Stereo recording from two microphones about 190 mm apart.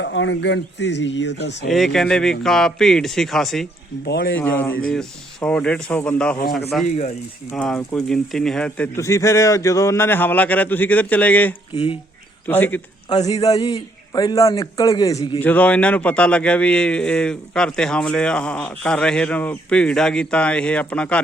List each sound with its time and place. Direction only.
0.0 s speech: 75° left (ahead or behind)
1.7 s a man's voice: centre (ahead or behind)
4.0 s speech: 65° left (ahead or behind)
4.4 s a man's voice: 10° left (ahead or behind)
6.8 s speech: 35° left (ahead or behind)
7.5 s a man's voice: centre (ahead or behind)
11.7 s a man's voice: 30° left (ahead or behind)
12.5 s a man's voice: 10° left (ahead or behind)
15.4 s a man's voice: 10° left (ahead or behind)